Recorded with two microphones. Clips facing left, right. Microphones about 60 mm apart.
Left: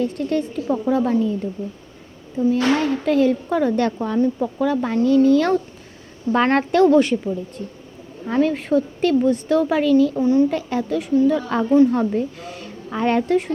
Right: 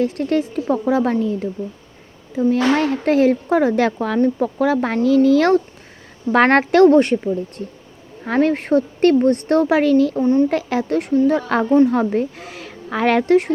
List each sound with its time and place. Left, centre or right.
0.0 s a woman's voice: right
0.5 s a woman's voice: right
1.2 s a woman's voice: right
2.4 s speech: right
4.2 s speech: right
6.3 s speech: right
6.9 s a woman's voice: right
8.2 s a woman's voice: right